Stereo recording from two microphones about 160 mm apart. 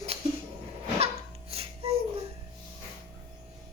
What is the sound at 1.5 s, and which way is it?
Music, 40° right (ahead or behind).